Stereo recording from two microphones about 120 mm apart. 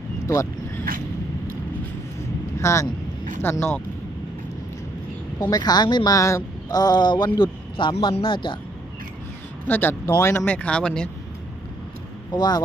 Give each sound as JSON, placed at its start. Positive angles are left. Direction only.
{"t": 2.6, "sound": "speech", "side_deg": 25}
{"t": 5.5, "sound": "speech", "side_deg": 35}
{"t": 6.1, "sound": "speech", "side_deg": 25}
{"t": 9.6, "sound": "speech", "side_deg": 15}
{"t": 12.3, "sound": "speech", "side_deg": 35}